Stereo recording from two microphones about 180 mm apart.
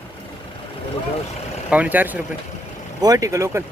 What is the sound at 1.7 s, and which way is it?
Speech, 10° right (ahead or behind).